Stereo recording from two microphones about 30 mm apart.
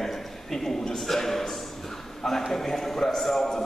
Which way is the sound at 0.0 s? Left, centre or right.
Centre.